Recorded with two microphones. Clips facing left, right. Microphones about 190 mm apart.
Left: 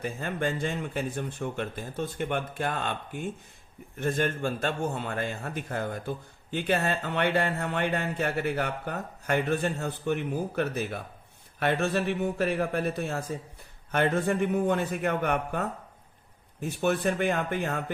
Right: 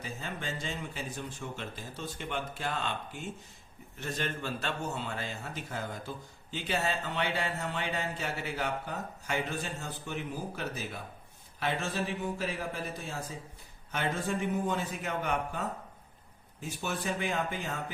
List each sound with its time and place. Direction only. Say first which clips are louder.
0.0 s a man's voice: left 9 dB; 55° left (ahead or behind)